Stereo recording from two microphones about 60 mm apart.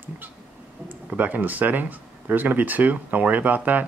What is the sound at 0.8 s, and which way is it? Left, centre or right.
Speech, right.